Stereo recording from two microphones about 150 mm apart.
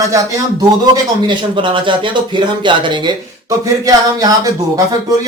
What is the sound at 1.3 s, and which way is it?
Speech, 30° right (ahead or behind).